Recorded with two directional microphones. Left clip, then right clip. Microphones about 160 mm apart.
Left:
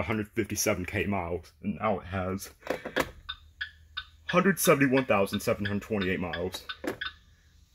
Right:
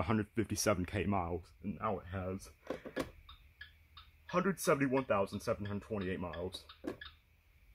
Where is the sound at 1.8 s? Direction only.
Centre (ahead or behind).